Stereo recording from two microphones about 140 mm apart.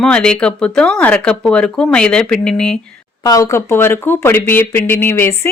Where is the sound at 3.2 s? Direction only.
25° left (ahead or behind).